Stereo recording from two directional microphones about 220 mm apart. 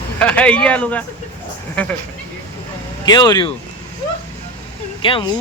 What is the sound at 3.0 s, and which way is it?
Speech, 20° left (ahead or behind).